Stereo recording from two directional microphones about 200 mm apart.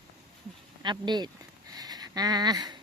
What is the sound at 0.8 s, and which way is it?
Speech, 20° right (ahead or behind).